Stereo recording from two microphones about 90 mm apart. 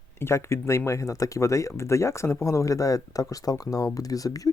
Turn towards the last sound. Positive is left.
turn(degrees=40)  # may be behind; listen again after turning